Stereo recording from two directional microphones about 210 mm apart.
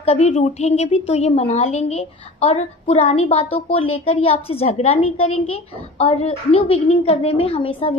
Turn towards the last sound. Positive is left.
turn(degrees=25)  # may be behind; listen again after turning